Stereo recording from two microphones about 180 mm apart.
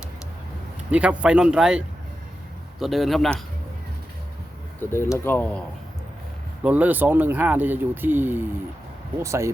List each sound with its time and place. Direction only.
0.9 s speech: 5° right (ahead or behind)
4.8 s speech: 15° left (ahead or behind)
6.6 s speech: 10° right (ahead or behind)